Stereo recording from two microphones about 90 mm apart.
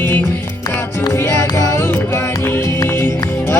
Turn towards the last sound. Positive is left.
turn(degrees=25)  # may be behind; listen again after turning